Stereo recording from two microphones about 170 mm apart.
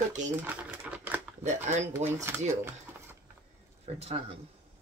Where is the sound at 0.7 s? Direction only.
10° right (ahead or behind).